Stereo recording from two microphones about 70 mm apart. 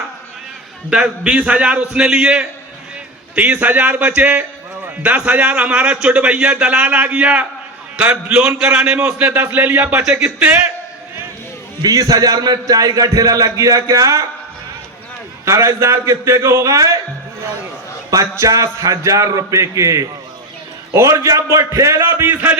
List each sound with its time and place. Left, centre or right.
0.9 s a man's voice: centre
8.5 s a man's voice: centre
9.1 s a man's voice: right
11.8 s a man's voice: right
15.4 s a man's voice: right
18.1 s a man's voice: right